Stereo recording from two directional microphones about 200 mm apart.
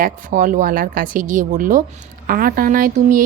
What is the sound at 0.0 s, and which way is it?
A woman's voice, 40° right (ahead or behind).